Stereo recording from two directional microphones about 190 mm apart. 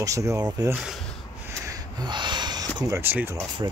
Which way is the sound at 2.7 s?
15° right (ahead or behind).